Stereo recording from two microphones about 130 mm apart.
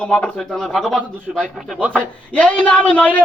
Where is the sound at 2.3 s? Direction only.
10° left (ahead or behind).